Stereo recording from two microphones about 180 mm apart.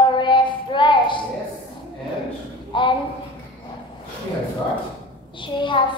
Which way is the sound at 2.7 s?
25° left (ahead or behind).